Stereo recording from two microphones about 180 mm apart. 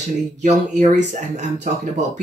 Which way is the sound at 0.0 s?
40° right (ahead or behind).